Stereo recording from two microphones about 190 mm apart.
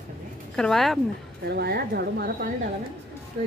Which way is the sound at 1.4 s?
60° right (ahead or behind).